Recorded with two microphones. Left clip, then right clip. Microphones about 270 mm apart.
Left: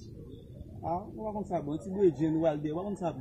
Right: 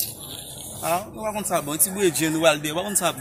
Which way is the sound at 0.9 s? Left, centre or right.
Right.